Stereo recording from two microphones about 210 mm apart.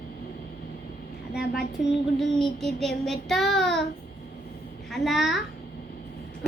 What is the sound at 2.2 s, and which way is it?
Child singing, centre (ahead or behind).